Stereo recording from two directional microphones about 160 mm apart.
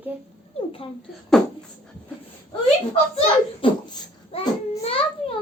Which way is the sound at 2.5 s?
35° left (ahead or behind).